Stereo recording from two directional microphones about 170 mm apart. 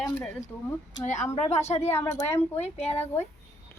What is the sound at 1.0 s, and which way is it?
Speech, 45° left (ahead or behind).